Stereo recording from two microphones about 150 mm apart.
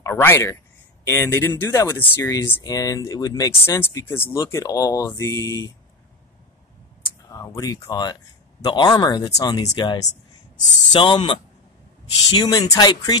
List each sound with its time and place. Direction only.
0.0 s speech: 15° left (ahead or behind)
7.3 s speech: 20° left (ahead or behind)